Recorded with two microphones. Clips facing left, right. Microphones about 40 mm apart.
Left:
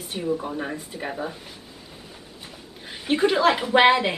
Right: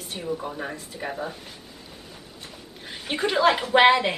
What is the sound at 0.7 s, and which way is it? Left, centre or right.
A woman's voice, centre.